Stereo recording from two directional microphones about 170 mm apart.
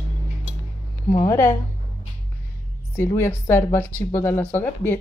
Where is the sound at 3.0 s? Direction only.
15° left (ahead or behind).